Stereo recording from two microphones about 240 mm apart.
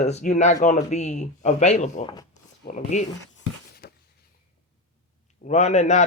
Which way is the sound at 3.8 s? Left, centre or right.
Left.